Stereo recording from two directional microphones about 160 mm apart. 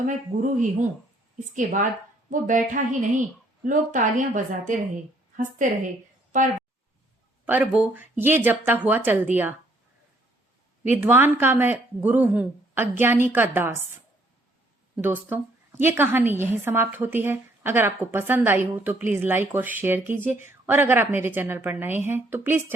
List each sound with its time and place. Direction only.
0.0 s speech: 55° right (ahead or behind)
7.4 s a woman's voice: 10° right (ahead or behind)
10.8 s a woman's voice: 10° right (ahead or behind)
14.9 s a woman's voice: 10° right (ahead or behind)